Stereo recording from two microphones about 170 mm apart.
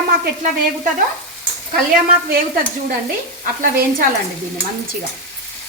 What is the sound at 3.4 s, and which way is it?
Speech, 55° right (ahead or behind).